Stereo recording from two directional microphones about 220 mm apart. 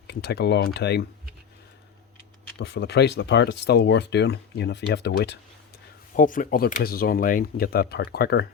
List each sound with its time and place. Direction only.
0.1 s speech: 50° left (ahead or behind)
2.6 s speech: 50° left (ahead or behind)
6.1 s speech: 35° left (ahead or behind)